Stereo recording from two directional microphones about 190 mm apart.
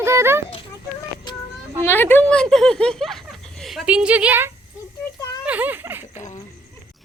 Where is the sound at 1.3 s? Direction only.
20° left (ahead or behind).